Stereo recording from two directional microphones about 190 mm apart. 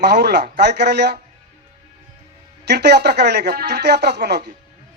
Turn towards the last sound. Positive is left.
turn(degrees=-60)  # may be behind; listen again after turning